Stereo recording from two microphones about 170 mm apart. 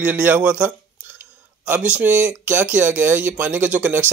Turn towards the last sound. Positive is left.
turn(degrees=-10)  # may be behind; listen again after turning